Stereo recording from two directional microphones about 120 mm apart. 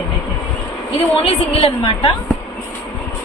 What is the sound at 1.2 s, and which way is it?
Speech, 55° left (ahead or behind).